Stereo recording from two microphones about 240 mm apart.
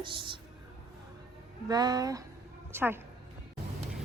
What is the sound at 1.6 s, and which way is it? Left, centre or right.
A woman's voice, centre.